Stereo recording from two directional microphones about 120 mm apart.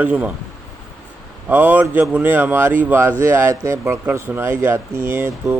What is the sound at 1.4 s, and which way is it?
Speech, 15° right (ahead or behind).